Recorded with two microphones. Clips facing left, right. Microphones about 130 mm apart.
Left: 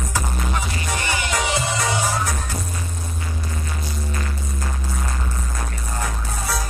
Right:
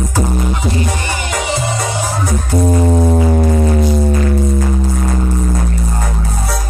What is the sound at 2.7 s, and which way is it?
Music, 90° right.